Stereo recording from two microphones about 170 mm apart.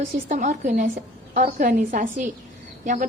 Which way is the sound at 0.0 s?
50° right (ahead or behind).